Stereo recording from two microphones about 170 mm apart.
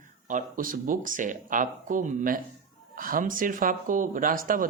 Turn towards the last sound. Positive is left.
turn(degrees=-55)  # may be behind; listen again after turning